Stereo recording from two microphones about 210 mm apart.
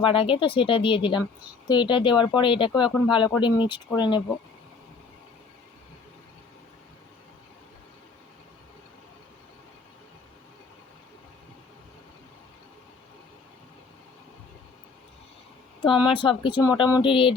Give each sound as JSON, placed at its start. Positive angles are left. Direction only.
{"t": 0.0, "sound": "speech", "side_deg": 25}
{"t": 15.8, "sound": "speech", "side_deg": 25}